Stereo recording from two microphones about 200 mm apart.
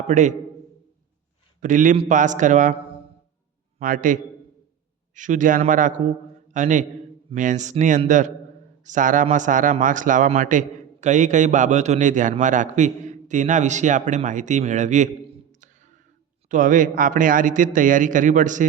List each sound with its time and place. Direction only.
0.1 s speech: 35° right (ahead or behind)
1.6 s speech: 40° right (ahead or behind)
3.8 s a man's voice: 40° right (ahead or behind)
15.6 s a sound: 40° right (ahead or behind)
16.5 s speech: 40° right (ahead or behind)